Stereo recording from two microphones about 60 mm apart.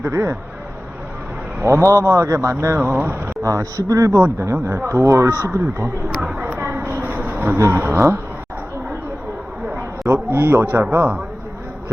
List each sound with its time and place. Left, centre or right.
0.0 s speech: right
1.6 s speech: right
3.4 s speech: right
4.6 s speech: right
6.4 s a sound: right
7.5 s speech: right
10.1 s speech: right